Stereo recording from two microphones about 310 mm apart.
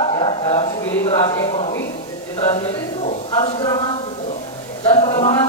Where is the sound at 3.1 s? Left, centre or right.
Centre.